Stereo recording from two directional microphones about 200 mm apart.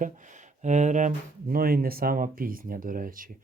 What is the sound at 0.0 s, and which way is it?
Speech, 40° right (ahead or behind).